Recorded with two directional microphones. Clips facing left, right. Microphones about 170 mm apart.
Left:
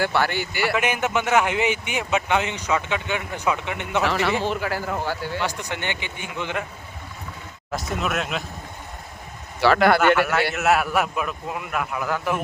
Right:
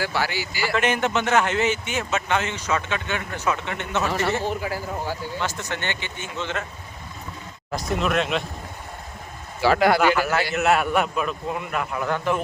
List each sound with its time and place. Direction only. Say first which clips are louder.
0.0 s a man's voice: left 3 dB; 55° left (ahead or behind)
0.8 s a man's voice: right 4 dB; 10° left (ahead or behind)
4.0 s a man's voice: left 1 dB; 90° left; by 5.4 s 75° left (ahead or behind)
5.4 s a man's voice: left 1 dB; 15° left (ahead or behind)
7.7 s a man's voice: right 2 dB; centre (ahead or behind)
9.6 s speech: left 1 dB; 65° left (ahead or behind)
10.2 s a man's voice: left 1 dB; centre (ahead or behind)